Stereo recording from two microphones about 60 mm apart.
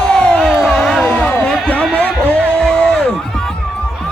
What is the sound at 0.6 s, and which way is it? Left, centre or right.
Music, centre.